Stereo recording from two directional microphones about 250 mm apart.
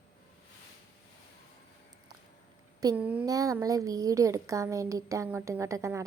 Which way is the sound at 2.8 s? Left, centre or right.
Centre.